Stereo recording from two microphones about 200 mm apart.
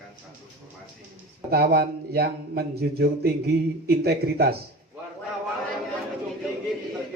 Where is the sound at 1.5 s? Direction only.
50° right (ahead or behind).